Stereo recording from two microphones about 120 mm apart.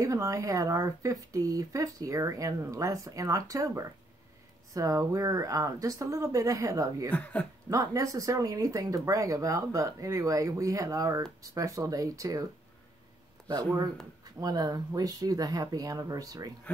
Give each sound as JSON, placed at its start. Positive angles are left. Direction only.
{"t": 0.0, "sound": "speech", "side_deg": -30}
{"t": 7.1, "sound": "speech", "side_deg": 10}
{"t": 7.7, "sound": "speech", "side_deg": -30}
{"t": 13.5, "sound": "speech", "side_deg": -35}